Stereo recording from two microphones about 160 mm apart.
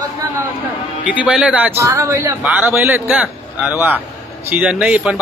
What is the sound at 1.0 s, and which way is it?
A man's voice, 5° right (ahead or behind).